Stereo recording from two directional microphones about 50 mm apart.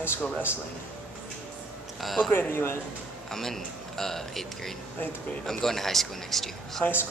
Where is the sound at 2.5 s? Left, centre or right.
Left.